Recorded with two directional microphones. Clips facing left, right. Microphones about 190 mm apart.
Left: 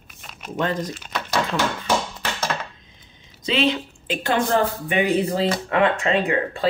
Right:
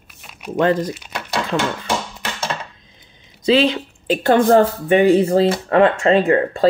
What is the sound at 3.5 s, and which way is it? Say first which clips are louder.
Speech: right 6 dB; 40° right (ahead or behind).